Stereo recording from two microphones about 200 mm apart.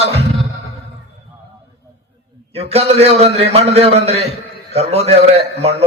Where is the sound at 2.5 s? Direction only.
30° right (ahead or behind).